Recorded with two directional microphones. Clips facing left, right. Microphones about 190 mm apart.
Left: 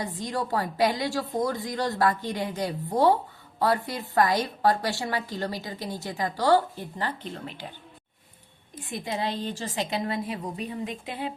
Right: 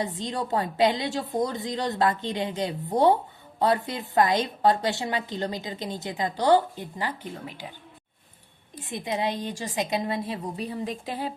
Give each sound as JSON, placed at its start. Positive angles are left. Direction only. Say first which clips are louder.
{"t": 0.0, "sound": "a woman's voice", "louder": "right 1 dB", "side_deg": -20}
{"t": 8.8, "sound": "a woman's voice", "louder": "right 2 dB", "side_deg": -20}